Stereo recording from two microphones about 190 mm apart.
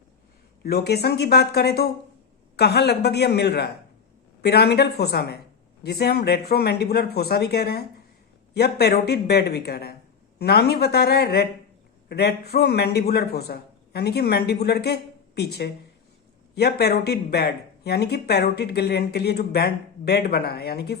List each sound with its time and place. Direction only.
0.6 s speech: 55° left (ahead or behind)